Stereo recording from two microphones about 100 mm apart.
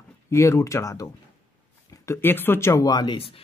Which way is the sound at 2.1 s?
20° left (ahead or behind).